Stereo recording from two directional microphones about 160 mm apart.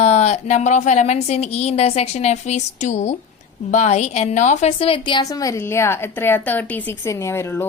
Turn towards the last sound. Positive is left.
turn(degrees=15)  # may be behind; listen again after turning